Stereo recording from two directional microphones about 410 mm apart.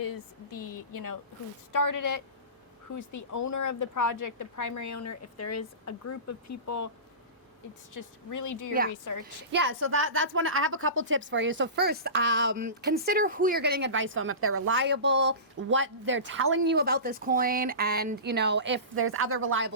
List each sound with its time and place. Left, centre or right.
0.0 s a woman's voice: left
7.9 s a woman's voice: left
9.5 s a woman's voice: right